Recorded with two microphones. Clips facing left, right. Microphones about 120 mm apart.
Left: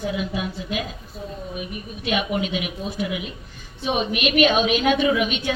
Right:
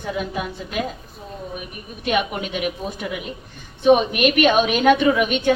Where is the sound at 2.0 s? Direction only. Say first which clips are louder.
Right 1 dB; 45° right (ahead or behind).